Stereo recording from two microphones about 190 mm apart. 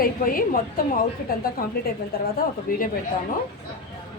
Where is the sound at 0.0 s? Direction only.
50° left (ahead or behind).